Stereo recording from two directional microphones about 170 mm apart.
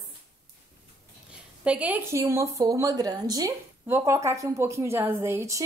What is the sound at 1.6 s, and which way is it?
Speech, 10° right (ahead or behind).